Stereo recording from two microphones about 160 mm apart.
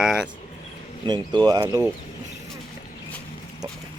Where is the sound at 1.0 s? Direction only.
25° right (ahead or behind).